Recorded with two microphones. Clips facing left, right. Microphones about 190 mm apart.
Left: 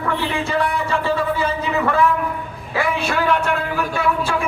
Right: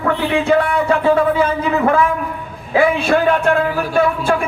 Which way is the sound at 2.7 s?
55° right (ahead or behind).